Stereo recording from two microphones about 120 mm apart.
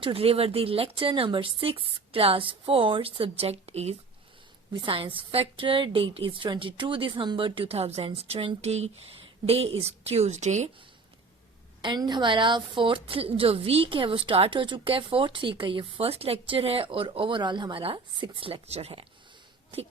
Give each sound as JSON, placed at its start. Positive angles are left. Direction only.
{"t": 0.0, "sound": "a woman's voice", "side_deg": -55}
{"t": 4.7, "sound": "a woman's voice", "side_deg": -45}
{"t": 11.8, "sound": "a woman's voice", "side_deg": -40}